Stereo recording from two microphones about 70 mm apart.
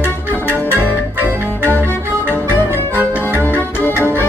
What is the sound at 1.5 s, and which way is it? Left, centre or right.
Music, left.